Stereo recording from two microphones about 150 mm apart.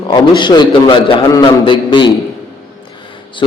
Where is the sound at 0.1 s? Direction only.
30° left (ahead or behind).